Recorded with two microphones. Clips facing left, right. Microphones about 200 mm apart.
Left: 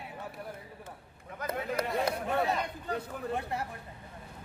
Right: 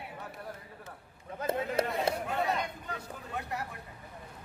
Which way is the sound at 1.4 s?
25° right (ahead or behind).